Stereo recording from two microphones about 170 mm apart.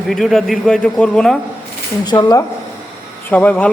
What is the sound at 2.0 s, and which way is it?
Speech, 25° left (ahead or behind).